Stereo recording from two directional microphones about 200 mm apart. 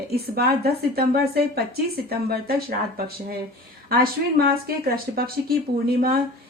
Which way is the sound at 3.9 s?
50° right (ahead or behind).